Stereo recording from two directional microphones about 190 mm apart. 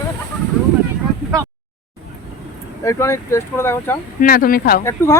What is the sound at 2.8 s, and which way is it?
Speech, 15° left (ahead or behind).